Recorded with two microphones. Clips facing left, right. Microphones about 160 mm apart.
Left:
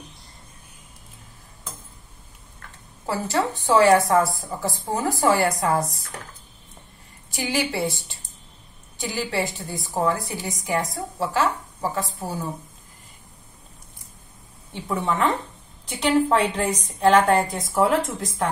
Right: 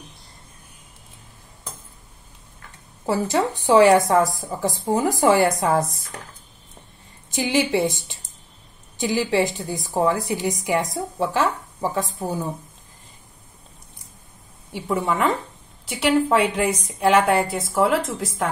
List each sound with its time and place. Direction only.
3.1 s a woman's voice: 20° right (ahead or behind)
7.3 s a woman's voice: 20° right (ahead or behind)
14.7 s a woman's voice: 10° right (ahead or behind)